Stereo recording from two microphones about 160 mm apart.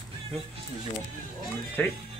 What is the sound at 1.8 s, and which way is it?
Speech, 10° left (ahead or behind).